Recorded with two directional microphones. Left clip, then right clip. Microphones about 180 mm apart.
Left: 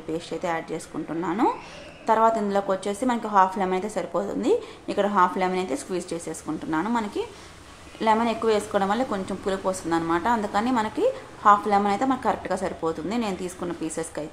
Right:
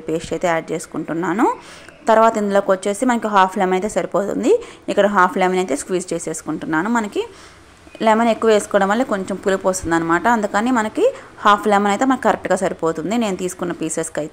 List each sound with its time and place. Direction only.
0.1 s a woman's voice: 40° right (ahead or behind)